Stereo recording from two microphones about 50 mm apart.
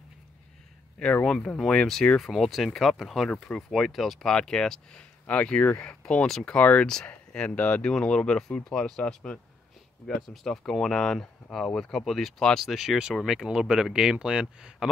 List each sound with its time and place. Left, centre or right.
1.2 s speech: centre
7.8 s speech: centre
10.2 s speech: centre